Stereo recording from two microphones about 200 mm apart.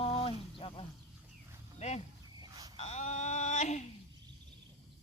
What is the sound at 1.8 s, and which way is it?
Speech, 30° left (ahead or behind).